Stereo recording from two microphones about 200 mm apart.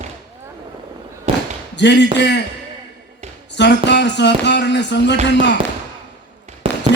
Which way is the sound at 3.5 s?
60° left (ahead or behind).